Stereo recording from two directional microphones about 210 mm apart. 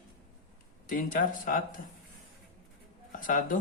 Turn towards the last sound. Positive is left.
turn(degrees=40)  # may be behind; listen again after turning